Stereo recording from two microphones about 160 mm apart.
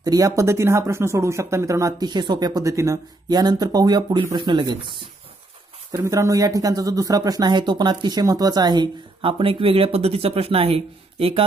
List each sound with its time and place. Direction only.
0.0 s speech: 20° right (ahead or behind)